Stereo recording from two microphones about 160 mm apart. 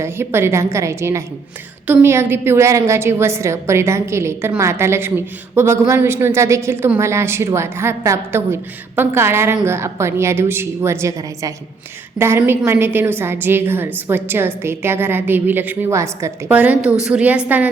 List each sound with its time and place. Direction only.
0.0 s a woman's voice: 15° right (ahead or behind)